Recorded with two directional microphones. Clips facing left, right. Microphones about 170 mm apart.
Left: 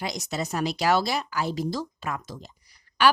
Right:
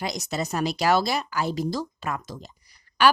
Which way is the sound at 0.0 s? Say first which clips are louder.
Right 2 dB; 45° right (ahead or behind).